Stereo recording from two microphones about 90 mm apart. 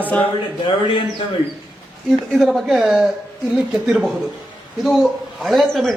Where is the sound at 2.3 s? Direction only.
Centre (ahead or behind).